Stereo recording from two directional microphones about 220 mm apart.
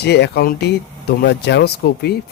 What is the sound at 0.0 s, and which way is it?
Speech, 50° left (ahead or behind).